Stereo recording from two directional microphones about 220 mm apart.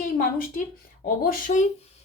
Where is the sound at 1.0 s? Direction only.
40° left (ahead or behind).